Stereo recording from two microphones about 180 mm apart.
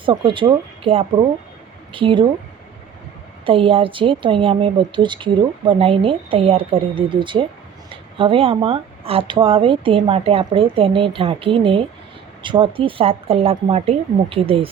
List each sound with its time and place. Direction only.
0.0 s a woman's voice: 25° right (ahead or behind)
3.4 s a woman's voice: 30° right (ahead or behind)